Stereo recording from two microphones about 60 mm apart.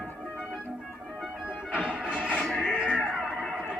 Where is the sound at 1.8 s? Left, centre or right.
Centre.